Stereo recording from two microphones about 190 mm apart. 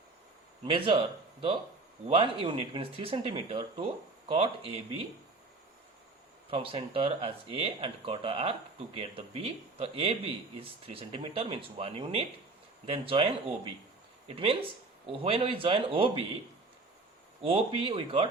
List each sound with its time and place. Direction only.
0.6 s a man's voice: 25° right (ahead or behind)
6.5 s a man's voice: 30° right (ahead or behind)
14.3 s a man's voice: 30° right (ahead or behind)
17.4 s a man's voice: 30° right (ahead or behind)